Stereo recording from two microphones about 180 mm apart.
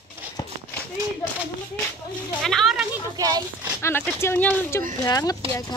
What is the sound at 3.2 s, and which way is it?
Speech, 20° right (ahead or behind).